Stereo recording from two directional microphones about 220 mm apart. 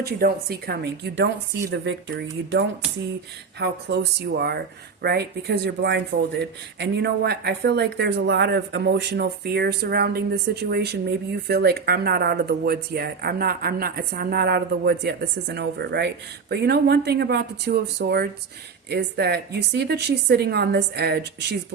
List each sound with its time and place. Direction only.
0.0 s speech: 45° right (ahead or behind)
3.6 s speech: 50° right (ahead or behind)